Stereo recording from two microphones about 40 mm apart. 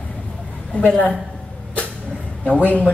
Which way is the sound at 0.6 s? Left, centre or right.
Left.